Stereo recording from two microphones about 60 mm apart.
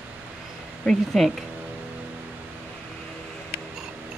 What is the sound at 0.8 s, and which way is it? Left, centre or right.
Speech, centre.